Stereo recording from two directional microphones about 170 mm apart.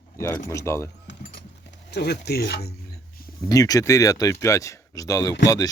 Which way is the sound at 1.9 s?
75° left (ahead or behind).